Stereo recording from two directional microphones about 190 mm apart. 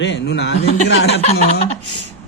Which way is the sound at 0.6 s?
35° left (ahead or behind).